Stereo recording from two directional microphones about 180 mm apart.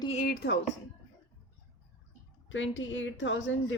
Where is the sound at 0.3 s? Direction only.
65° left (ahead or behind).